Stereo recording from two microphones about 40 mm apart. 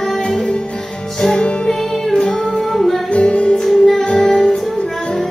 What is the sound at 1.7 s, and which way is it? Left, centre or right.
Music, centre.